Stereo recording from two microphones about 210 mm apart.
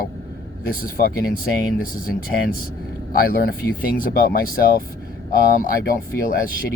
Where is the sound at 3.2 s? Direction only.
45° left (ahead or behind).